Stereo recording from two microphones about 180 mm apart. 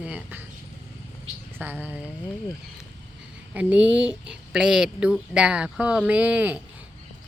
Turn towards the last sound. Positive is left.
turn(degrees=-10)  # may be behind; listen again after turning